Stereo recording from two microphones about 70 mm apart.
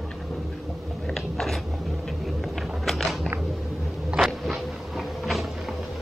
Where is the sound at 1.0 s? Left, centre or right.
Centre.